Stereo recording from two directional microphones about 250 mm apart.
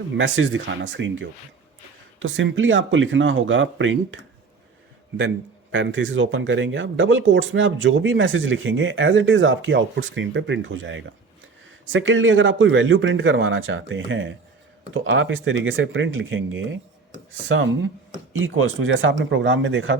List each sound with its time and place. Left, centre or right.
0.2 s speech: right
5.7 s speech: right